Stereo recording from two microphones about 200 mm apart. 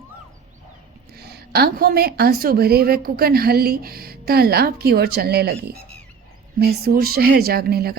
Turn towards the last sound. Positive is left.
turn(degrees=-50)  # may be behind; listen again after turning